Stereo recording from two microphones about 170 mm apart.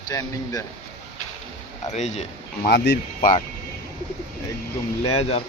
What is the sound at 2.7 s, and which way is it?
Speech, 80° left.